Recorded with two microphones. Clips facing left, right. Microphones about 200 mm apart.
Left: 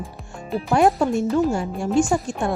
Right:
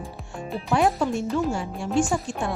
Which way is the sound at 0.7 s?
45° left (ahead or behind).